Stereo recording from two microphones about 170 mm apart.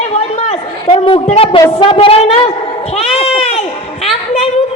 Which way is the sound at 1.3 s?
35° left (ahead or behind).